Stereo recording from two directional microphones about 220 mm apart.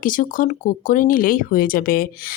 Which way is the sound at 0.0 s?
40° left (ahead or behind).